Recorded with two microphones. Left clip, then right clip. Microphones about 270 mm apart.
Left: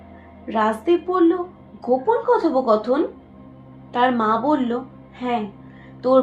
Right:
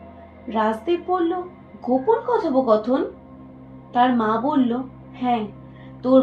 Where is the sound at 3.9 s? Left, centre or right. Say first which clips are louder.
Even; left.